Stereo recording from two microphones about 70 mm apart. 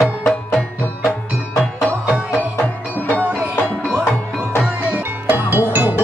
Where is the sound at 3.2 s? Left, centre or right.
Right.